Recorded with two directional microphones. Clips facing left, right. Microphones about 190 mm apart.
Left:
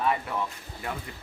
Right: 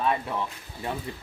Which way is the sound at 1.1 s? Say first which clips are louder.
Right 5 dB; 30° right (ahead or behind).